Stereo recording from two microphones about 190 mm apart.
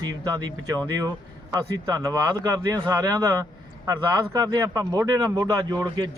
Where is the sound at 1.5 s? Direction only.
20° right (ahead or behind).